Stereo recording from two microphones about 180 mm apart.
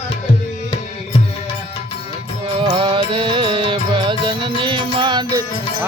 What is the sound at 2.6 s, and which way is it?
Music, 25° right (ahead or behind).